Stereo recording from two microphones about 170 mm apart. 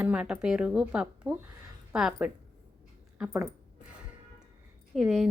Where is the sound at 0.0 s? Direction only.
5° right (ahead or behind).